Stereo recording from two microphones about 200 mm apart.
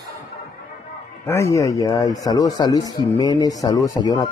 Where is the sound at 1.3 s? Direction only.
15° left (ahead or behind).